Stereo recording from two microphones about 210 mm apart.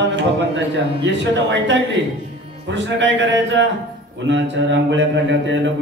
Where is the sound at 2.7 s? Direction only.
60° right (ahead or behind).